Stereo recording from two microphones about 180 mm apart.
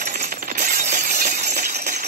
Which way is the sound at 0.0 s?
45° right (ahead or behind).